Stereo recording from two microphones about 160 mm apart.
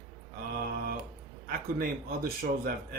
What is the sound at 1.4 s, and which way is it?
A man's voice, 65° right (ahead or behind).